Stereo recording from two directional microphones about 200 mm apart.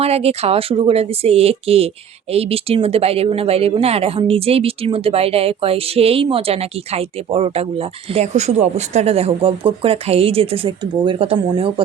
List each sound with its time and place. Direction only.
0.0 s speech: 30° right (ahead or behind)